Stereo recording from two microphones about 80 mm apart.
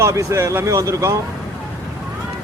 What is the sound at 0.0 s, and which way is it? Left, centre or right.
A man's voice, right.